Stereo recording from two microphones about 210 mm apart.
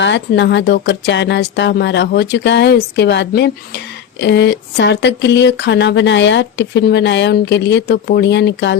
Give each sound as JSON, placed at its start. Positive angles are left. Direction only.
{"t": 0.0, "sound": "speech", "side_deg": 55}